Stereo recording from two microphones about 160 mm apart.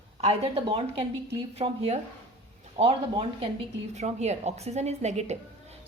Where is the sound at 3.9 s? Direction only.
45° right (ahead or behind).